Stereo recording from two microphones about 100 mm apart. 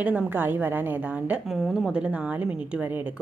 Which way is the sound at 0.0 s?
20° right (ahead or behind).